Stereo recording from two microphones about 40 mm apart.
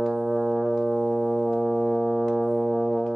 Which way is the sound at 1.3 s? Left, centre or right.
Centre.